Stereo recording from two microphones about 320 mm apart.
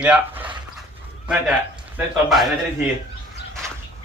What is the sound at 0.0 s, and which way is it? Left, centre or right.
Speech, centre.